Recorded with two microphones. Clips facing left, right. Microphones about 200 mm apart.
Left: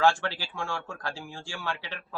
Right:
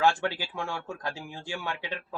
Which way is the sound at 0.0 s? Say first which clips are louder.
Left 1 dB; 15° right (ahead or behind).